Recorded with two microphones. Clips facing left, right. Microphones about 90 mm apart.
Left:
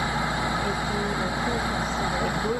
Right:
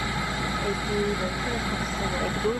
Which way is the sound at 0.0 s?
20° left (ahead or behind).